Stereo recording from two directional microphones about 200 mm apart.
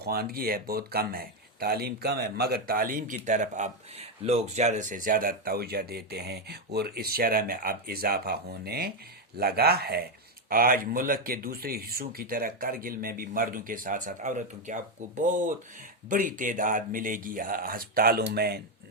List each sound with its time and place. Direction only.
0.0 s speech: 50° right (ahead or behind)